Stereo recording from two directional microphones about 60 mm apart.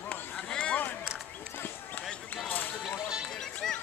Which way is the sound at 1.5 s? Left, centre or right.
Left.